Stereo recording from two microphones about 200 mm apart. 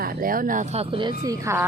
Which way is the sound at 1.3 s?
15° right (ahead or behind).